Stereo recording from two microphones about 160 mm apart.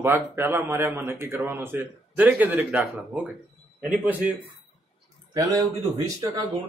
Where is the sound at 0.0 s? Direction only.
15° right (ahead or behind).